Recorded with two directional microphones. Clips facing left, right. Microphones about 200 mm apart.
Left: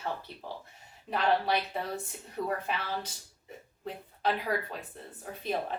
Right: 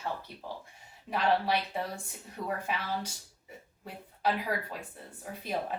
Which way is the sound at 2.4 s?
10° right (ahead or behind).